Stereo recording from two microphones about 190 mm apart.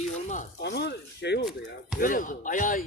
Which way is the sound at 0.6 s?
60° left (ahead or behind).